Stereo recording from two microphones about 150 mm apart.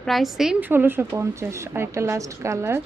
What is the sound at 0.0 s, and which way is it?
Speech, centre (ahead or behind).